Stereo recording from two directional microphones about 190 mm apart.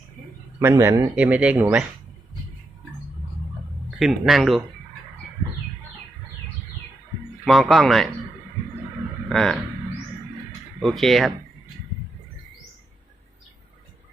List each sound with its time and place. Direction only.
0.6 s speech: 15° right (ahead or behind)
3.9 s speech: centre (ahead or behind)
7.4 s speech: centre (ahead or behind)
9.3 s speech: centre (ahead or behind)
10.8 s speech: centre (ahead or behind)